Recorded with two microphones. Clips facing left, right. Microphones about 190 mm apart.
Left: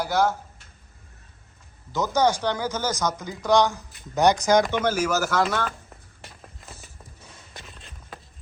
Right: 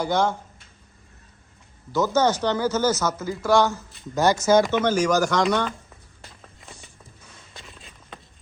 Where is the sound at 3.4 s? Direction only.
15° left (ahead or behind).